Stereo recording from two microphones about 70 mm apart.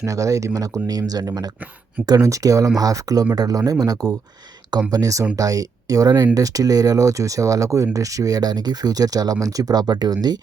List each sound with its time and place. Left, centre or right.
0.0 s speech: right